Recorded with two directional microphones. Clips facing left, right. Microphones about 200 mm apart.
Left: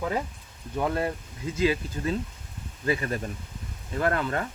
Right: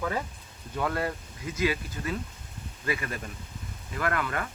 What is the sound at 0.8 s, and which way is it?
Speech, 20° left (ahead or behind).